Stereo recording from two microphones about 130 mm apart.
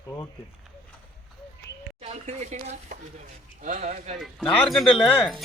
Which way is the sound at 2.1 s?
60° right (ahead or behind).